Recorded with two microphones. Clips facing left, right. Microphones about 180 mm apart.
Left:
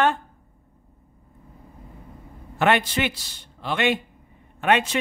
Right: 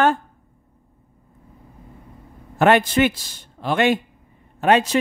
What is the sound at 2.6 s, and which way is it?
Speech, 45° right (ahead or behind).